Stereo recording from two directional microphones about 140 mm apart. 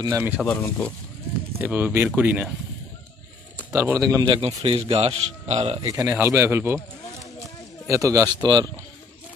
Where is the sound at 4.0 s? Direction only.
25° right (ahead or behind).